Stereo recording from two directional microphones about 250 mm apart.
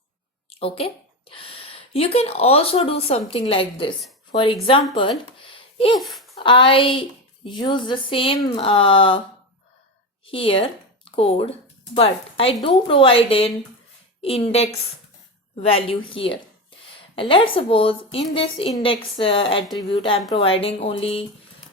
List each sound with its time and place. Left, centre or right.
0.5 s a woman's voice: left
6.0 s a child's voice: centre
6.3 s speech: centre
10.2 s a woman's voice: left